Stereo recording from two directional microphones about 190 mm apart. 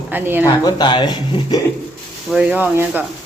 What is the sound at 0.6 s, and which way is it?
Speech, 25° left (ahead or behind).